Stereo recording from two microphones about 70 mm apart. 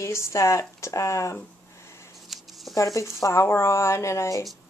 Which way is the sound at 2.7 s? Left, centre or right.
Left.